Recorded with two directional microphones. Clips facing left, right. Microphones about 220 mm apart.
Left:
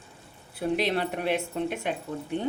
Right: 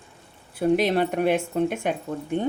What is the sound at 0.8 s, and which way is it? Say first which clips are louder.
Speech: right 6 dB; 50° right (ahead or behind).